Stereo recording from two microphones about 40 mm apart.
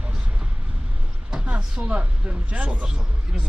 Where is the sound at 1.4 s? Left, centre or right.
Right.